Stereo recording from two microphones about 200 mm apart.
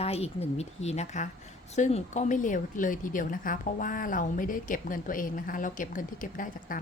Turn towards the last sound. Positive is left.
turn(degrees=40)  # may be behind; listen again after turning